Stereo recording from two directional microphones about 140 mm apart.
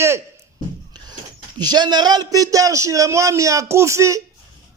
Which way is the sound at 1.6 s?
30° right (ahead or behind).